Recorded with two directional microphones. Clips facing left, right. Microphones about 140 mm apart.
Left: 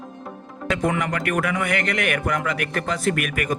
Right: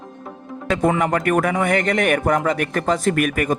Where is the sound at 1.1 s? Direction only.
45° right (ahead or behind).